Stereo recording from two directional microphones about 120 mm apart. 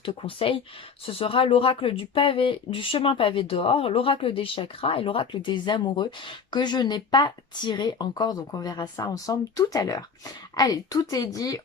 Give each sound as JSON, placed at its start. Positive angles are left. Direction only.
{"t": 0.0, "sound": "a woman's voice", "side_deg": 45}